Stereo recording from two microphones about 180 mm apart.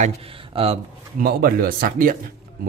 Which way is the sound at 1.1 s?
55° right (ahead or behind).